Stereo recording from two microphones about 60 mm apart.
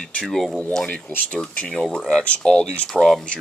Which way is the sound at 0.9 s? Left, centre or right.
Centre.